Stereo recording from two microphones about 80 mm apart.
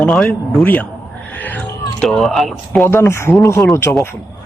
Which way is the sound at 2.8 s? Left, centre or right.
Left.